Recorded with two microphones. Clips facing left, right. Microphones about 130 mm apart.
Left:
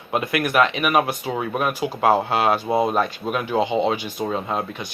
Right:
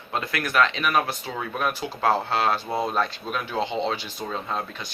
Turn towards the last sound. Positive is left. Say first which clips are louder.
# left 5 dB
turn(degrees=10)  # may be behind; listen again after turning